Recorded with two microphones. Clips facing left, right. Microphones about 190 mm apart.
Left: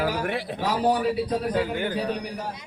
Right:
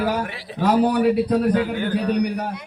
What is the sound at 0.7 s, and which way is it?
Speech, 60° right (ahead or behind).